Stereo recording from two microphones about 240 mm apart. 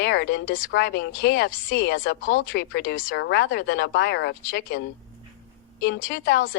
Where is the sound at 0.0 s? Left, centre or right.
Left.